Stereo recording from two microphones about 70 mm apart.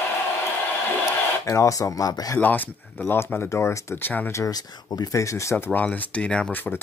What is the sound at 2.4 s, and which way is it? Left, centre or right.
Speech, left.